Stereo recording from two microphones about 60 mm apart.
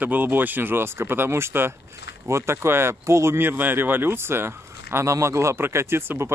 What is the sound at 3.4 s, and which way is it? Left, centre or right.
Speech, right.